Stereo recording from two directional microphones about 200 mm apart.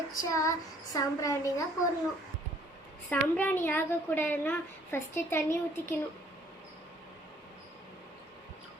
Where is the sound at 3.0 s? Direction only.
10° left (ahead or behind).